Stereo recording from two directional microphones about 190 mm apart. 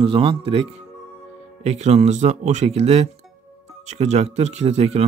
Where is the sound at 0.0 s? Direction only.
30° right (ahead or behind).